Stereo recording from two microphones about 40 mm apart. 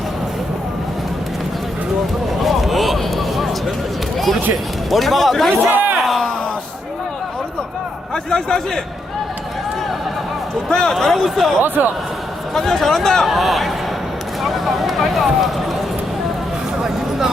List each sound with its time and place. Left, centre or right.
2.4 s a sound: centre
4.9 s a man's voice: centre
5.5 s a man's voice: right
8.1 s a man's voice: centre
10.7 s a man's voice: centre
11.6 s speech: right
12.5 s a man's voice: centre
13.2 s a man's voice: centre
16.8 s a sound: centre